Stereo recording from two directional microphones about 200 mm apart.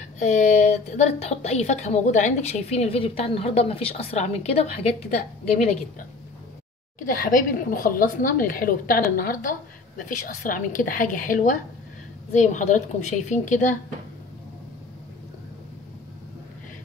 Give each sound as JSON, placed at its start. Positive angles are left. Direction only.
{"t": 0.2, "sound": "a woman's voice", "side_deg": 35}
{"t": 7.1, "sound": "a woman's voice", "side_deg": 45}